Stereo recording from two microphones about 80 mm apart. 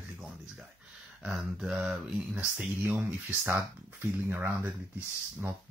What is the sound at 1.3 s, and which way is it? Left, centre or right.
Speech, centre.